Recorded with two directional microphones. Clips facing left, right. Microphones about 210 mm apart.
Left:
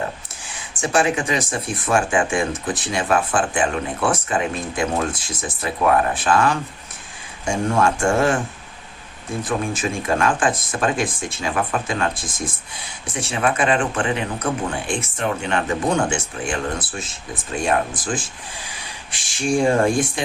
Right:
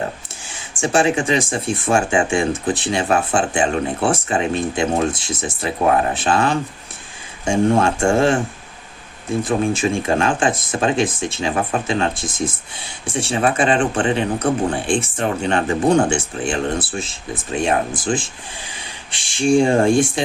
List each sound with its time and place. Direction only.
0.7 s speech: 25° right (ahead or behind)
9.4 s speech: 25° right (ahead or behind)